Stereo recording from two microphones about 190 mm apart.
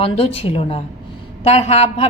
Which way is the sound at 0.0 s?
30° left (ahead or behind).